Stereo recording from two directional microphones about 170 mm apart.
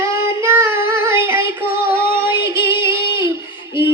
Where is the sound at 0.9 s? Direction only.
15° right (ahead or behind).